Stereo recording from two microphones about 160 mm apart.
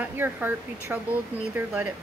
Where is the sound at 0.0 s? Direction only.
10° right (ahead or behind).